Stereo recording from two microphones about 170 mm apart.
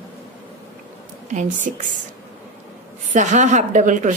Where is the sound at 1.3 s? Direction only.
50° right (ahead or behind).